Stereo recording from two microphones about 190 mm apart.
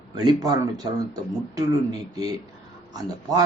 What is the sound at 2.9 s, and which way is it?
Speech, 20° right (ahead or behind).